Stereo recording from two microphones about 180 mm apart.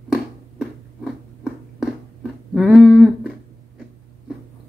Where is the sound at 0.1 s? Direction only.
5° right (ahead or behind).